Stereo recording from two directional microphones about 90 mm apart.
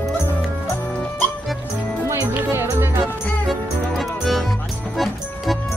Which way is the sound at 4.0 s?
Centre (ahead or behind).